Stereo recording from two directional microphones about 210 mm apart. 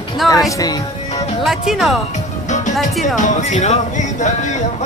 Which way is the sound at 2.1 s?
35° left (ahead or behind).